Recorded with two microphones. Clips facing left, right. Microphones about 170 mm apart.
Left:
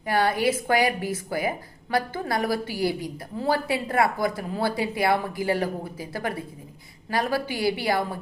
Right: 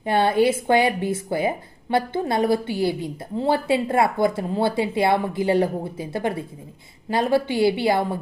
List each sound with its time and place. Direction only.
0.0 s speech: 25° right (ahead or behind)